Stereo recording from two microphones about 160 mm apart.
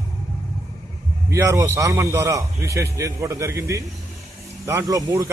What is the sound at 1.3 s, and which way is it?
A man's voice, 20° right (ahead or behind).